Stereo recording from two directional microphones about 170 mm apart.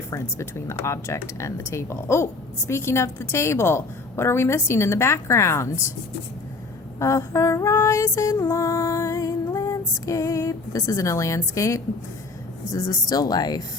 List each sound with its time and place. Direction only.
0.1 s speech: 15° left (ahead or behind)
7.0 s speech: 15° left (ahead or behind)